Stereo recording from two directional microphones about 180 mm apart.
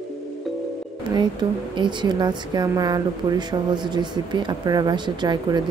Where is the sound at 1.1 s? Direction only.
25° right (ahead or behind).